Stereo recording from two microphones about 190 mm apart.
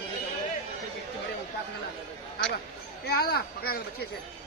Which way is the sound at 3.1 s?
55° left (ahead or behind).